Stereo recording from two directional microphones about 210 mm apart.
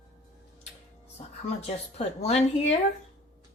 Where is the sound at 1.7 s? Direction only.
30° left (ahead or behind).